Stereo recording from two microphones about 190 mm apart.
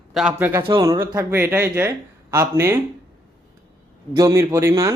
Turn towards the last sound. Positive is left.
turn(degrees=-15)  # may be behind; listen again after turning